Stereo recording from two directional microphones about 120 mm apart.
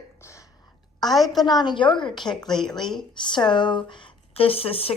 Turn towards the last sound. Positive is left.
turn(degrees=50)  # may be behind; listen again after turning